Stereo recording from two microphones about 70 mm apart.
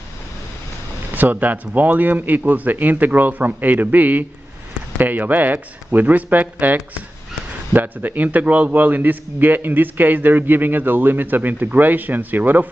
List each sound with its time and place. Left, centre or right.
1.1 s a man's voice: right